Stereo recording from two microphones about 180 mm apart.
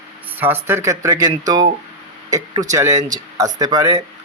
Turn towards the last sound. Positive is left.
turn(degrees=-20)  # may be behind; listen again after turning